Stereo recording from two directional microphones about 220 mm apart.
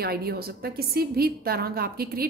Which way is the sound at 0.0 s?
45° right (ahead or behind).